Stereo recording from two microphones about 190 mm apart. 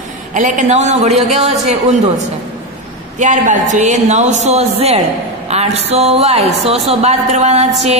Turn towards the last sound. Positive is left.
turn(degrees=-35)  # may be behind; listen again after turning